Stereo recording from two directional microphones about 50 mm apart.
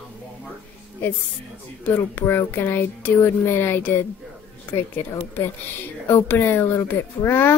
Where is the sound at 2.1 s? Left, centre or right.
Left.